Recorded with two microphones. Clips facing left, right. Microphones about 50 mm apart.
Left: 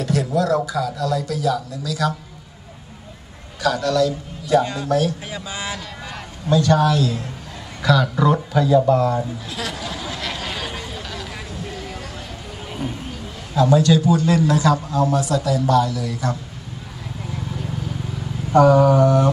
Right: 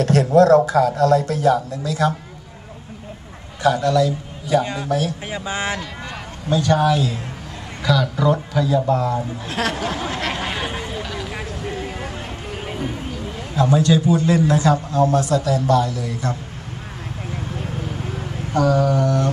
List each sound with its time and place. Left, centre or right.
0.0 s speech: right
3.6 s a man's voice: right
4.8 s speech: centre
5.3 s speech: right
6.5 s speech: centre
7.9 s speech: centre
9.5 s a sound: right; by 11.7 s centre
11.7 s a sound: right
13.6 s a man's voice: right
17.3 s vehicle: right
18.5 s speech: centre